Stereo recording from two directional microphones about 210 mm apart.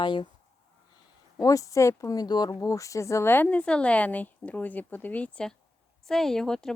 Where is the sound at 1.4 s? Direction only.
15° left (ahead or behind).